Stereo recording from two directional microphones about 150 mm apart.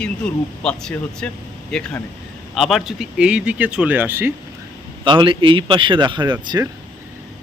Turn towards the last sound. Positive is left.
turn(degrees=-30)  # may be behind; listen again after turning